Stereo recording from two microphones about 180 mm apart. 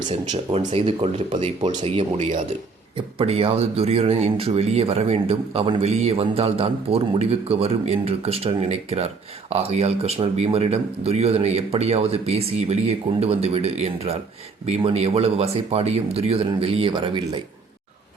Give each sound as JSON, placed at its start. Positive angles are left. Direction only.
{"t": 0.1, "sound": "speech", "side_deg": -35}